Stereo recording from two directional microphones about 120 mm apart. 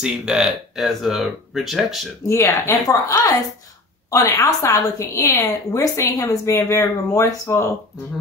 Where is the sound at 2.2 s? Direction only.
25° left (ahead or behind).